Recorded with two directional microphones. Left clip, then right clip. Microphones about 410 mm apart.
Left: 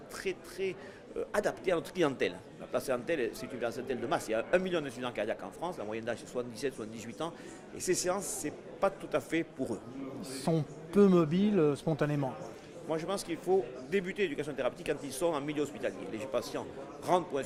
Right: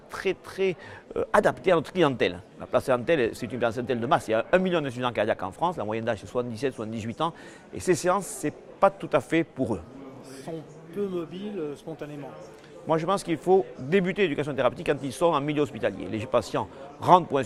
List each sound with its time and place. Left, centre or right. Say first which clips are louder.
0.1 s speech: right 9 dB; right
10.4 s a man's voice: left 5 dB; left
12.9 s speech: right 10 dB; right